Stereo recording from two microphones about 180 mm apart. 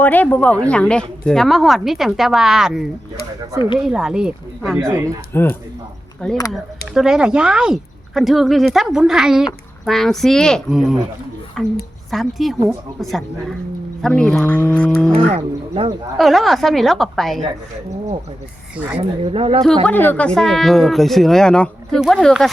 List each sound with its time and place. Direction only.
0.0 s speech: 10° left (ahead or behind)
3.8 s speech: 5° right (ahead or behind)
5.0 s speech: 10° left (ahead or behind)
15.3 s speech: 35° right (ahead or behind)
16.1 s speech: centre (ahead or behind)
18.9 s speech: 35° right (ahead or behind)
19.8 s speech: 10° left (ahead or behind)